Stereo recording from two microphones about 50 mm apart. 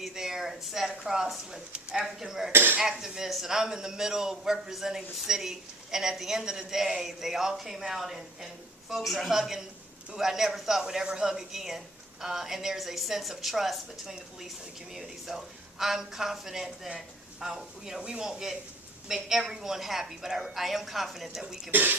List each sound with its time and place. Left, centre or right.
0.0 s a man's voice: centre
2.5 s speech: right
3.0 s a man's voice: centre
21.7 s speech: right